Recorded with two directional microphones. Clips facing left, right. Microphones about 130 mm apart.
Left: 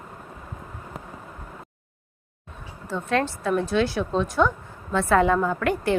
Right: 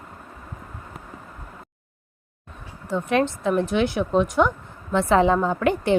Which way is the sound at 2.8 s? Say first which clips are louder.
Right 3 dB; 15° right (ahead or behind).